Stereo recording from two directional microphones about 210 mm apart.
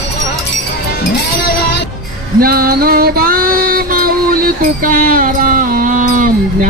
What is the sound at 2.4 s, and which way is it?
Music, 45° right (ahead or behind).